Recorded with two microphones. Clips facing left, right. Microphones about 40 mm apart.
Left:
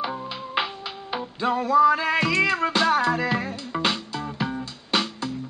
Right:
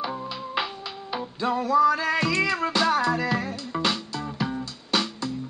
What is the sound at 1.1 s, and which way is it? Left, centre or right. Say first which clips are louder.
Music: left 2 dB; centre.